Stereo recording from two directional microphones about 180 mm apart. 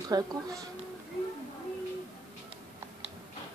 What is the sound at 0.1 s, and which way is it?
Speech, 20° right (ahead or behind).